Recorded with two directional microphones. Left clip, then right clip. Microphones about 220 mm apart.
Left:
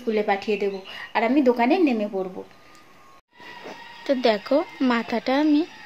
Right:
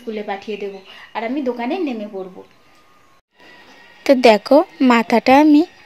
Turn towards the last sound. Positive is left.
turn(degrees=-35)  # may be behind; listen again after turning